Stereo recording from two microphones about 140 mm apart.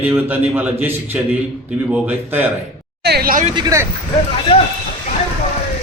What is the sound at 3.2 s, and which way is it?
Speech, 90° right.